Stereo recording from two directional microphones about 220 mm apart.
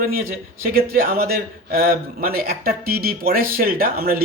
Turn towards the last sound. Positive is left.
turn(degrees=-40)  # may be behind; listen again after turning